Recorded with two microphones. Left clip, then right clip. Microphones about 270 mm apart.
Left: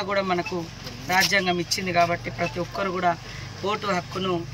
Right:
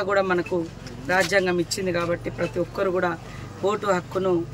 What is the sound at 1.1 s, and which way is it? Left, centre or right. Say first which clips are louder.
A man's voice: even; centre.